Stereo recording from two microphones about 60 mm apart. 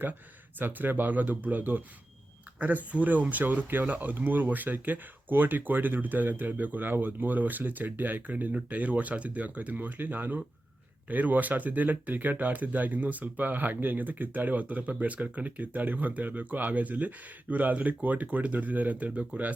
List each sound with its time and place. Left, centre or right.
0.6 s speech: right